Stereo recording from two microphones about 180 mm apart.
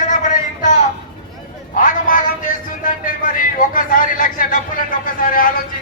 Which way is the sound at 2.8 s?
50° left (ahead or behind).